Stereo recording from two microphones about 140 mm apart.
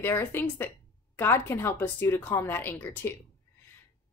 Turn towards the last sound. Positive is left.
turn(degrees=15)  # may be behind; listen again after turning